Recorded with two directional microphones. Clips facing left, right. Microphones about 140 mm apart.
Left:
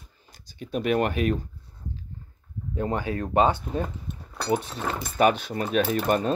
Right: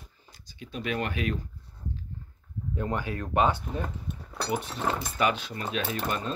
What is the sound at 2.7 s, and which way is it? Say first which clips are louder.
Speech: left 4 dB; 25° left (ahead or behind).